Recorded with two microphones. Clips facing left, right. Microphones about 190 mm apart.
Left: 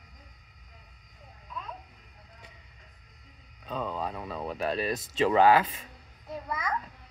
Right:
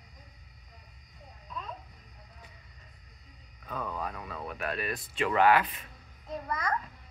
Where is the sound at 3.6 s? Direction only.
25° left (ahead or behind).